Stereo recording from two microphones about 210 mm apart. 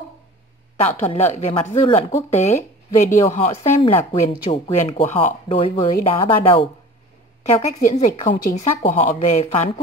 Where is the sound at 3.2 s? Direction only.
25° left (ahead or behind).